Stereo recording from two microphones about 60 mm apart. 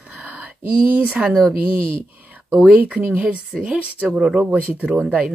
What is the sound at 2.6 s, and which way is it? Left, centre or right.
Speech, right.